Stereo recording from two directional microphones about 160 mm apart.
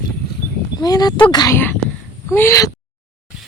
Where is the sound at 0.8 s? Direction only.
25° left (ahead or behind).